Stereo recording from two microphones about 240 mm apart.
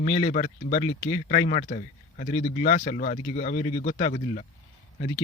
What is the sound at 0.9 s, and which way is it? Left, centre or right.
Speech, left.